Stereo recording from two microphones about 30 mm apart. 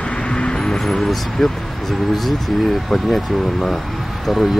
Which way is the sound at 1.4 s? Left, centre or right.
Centre.